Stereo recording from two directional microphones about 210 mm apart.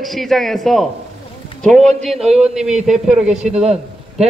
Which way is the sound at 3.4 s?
30° right (ahead or behind).